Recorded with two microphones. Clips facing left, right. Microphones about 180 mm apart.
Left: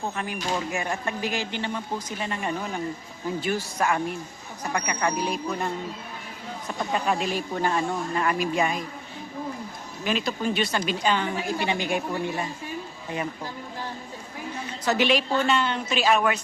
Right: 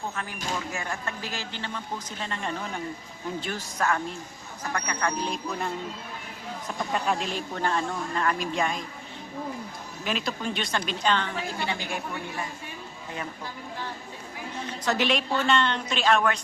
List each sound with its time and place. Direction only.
0.7 s speech: 15° left (ahead or behind)
10.0 s speech: centre (ahead or behind); by 12.0 s 20° left (ahead or behind)
14.8 s a woman's voice: centre (ahead or behind)